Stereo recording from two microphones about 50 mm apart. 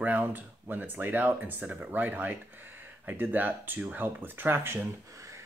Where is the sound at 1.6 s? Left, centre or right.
Right.